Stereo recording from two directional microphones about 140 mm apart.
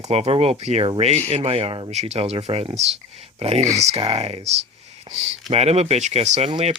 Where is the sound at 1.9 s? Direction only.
50° right (ahead or behind).